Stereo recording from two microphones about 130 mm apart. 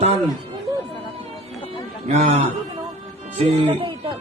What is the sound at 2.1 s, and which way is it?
A man's voice, 55° right (ahead or behind).